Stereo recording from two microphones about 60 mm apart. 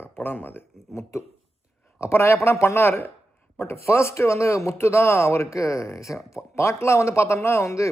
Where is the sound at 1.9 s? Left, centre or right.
Left.